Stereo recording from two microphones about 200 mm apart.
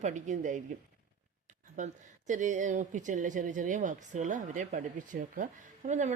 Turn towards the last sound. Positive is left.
turn(degrees=-35)  # may be behind; listen again after turning